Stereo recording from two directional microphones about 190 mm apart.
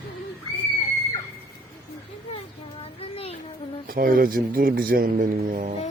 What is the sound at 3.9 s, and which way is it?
A man's voice, 50° right (ahead or behind).